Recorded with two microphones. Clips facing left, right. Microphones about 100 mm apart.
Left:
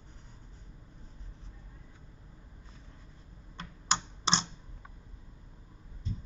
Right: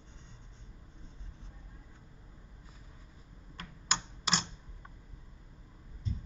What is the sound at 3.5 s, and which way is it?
Computer keyboard, 25° left (ahead or behind).